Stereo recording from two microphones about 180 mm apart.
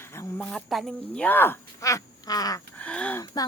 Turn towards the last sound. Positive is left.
turn(degrees=10)  # may be behind; listen again after turning